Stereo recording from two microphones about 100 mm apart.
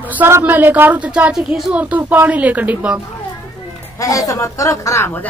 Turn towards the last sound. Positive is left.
turn(degrees=25)  # may be behind; listen again after turning